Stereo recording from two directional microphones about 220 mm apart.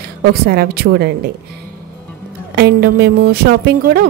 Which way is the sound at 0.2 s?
45° right (ahead or behind).